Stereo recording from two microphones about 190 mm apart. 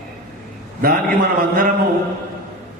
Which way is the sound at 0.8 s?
50° right (ahead or behind).